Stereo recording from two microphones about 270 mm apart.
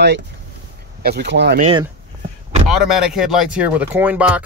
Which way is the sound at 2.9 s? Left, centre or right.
Centre.